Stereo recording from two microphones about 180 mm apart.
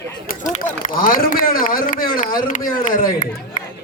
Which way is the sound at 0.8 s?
50° left (ahead or behind).